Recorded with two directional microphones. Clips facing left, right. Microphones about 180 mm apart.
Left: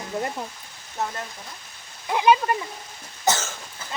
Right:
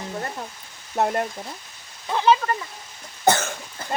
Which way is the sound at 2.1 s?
15° left (ahead or behind).